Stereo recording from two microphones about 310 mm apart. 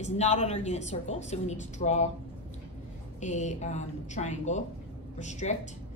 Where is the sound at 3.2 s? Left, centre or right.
Left.